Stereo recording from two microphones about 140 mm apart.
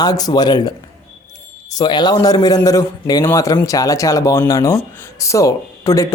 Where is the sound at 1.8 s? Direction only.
30° left (ahead or behind).